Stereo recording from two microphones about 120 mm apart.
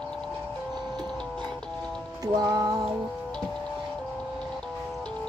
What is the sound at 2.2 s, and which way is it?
Music, 35° right (ahead or behind).